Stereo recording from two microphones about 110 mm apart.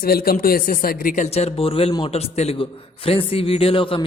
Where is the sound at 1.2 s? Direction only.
75° left (ahead or behind).